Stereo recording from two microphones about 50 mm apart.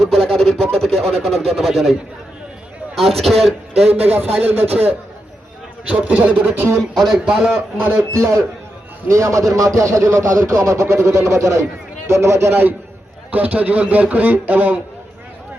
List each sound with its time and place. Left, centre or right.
0.0 s a man's voice: centre
3.8 s a man's voice: right
6.9 s a man's voice: centre
7.9 s speech: right
12.0 s a man's voice: right
13.3 s a man's voice: right